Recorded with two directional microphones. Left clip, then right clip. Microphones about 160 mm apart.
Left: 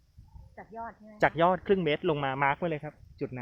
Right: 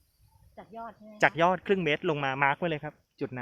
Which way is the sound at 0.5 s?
90° right.